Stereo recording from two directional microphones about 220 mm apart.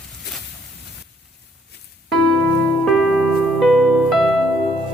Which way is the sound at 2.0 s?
Centre (ahead or behind).